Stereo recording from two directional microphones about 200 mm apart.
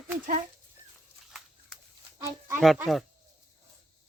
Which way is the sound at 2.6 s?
Centre (ahead or behind).